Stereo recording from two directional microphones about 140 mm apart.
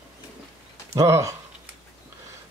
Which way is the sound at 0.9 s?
20° right (ahead or behind).